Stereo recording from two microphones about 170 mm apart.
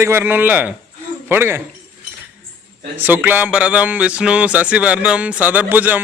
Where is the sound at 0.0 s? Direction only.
15° right (ahead or behind).